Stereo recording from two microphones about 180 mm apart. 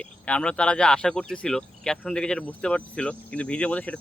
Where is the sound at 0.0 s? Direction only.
5° left (ahead or behind).